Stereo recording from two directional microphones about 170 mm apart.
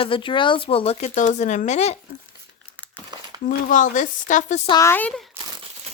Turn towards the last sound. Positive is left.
turn(degrees=-15)  # may be behind; listen again after turning